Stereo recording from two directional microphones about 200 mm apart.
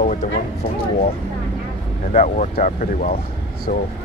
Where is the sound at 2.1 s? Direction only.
40° left (ahead or behind).